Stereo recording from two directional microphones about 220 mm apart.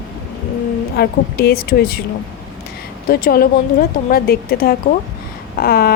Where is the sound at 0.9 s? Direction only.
45° left (ahead or behind).